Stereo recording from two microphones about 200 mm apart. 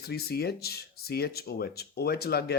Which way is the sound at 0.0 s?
50° left (ahead or behind).